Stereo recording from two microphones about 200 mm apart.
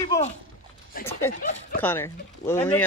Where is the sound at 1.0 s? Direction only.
10° left (ahead or behind).